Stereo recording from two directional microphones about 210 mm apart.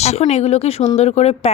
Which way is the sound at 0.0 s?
30° left (ahead or behind).